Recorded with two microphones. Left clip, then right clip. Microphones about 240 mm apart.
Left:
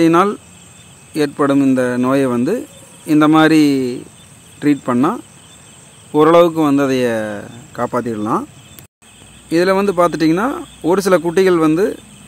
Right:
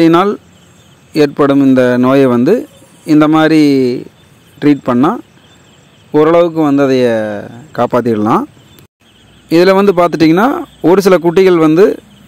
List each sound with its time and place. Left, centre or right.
0.0 s speech: right
9.5 s speech: right